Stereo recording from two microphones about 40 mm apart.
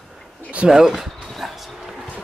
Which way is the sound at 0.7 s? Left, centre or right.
Centre.